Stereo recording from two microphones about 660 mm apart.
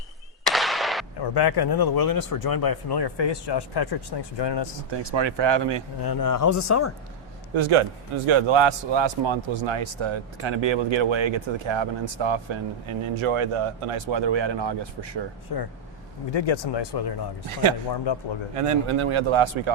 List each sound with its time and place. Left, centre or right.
0.4 s a sound: centre
1.2 s speech: left
4.9 s a man's voice: right
6.0 s speech: left
7.5 s a man's voice: right
15.5 s speech: left
18.5 s a man's voice: right